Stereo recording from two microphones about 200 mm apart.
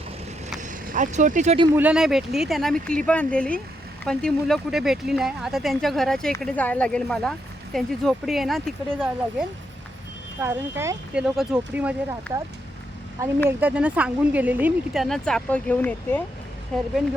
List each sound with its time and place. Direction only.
0.6 s vehicle: 40° right (ahead or behind)
1.7 s speech: 5° right (ahead or behind)
10.4 s speech: 10° right (ahead or behind); by 16.9 s 5° left (ahead or behind)